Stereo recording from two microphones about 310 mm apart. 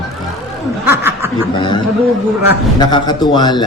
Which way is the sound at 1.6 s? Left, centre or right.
Centre.